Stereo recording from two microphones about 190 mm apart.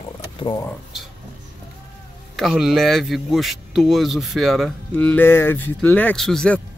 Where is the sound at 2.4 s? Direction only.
Centre (ahead or behind).